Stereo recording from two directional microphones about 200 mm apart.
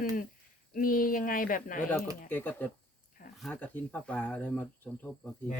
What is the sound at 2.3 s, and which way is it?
Speech, 10° left (ahead or behind).